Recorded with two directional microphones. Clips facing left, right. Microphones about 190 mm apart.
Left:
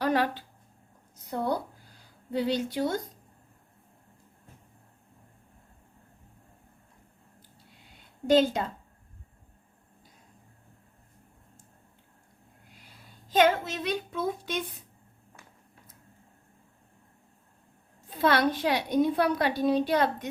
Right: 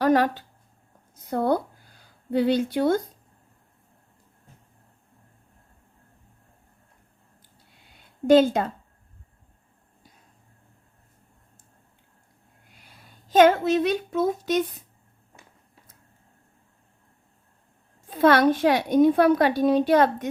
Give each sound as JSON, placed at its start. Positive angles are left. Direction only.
{"t": 0.0, "sound": "speech", "side_deg": -45}
{"t": 1.3, "sound": "a woman's voice", "side_deg": -55}
{"t": 8.3, "sound": "a woman's voice", "side_deg": -50}
{"t": 13.3, "sound": "a woman's voice", "side_deg": -50}
{"t": 18.1, "sound": "a woman's voice", "side_deg": -50}